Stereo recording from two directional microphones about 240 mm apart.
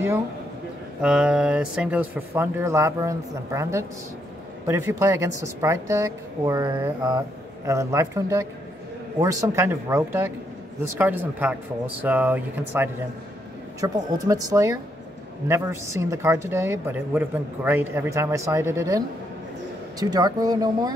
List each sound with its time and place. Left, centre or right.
1.0 s a woman's voice: centre